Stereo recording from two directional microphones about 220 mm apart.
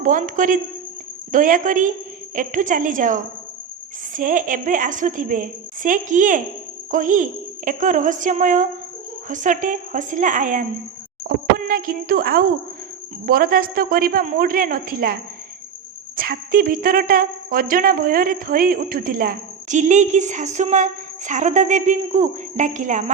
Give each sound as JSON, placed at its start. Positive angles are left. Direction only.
{"t": 0.0, "sound": "speech", "side_deg": -35}